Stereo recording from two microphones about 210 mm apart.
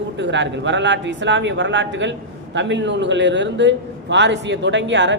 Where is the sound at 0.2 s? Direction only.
60° right (ahead or behind).